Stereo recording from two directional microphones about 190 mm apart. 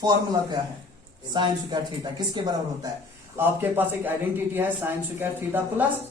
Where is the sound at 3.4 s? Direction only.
10° right (ahead or behind).